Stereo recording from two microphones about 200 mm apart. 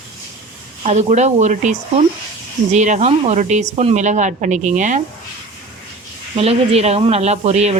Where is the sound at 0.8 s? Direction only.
35° right (ahead or behind).